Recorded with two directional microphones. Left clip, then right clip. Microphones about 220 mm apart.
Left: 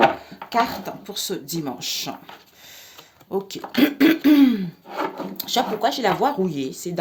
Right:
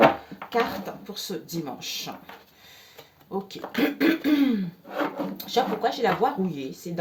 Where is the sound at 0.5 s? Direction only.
50° left (ahead or behind).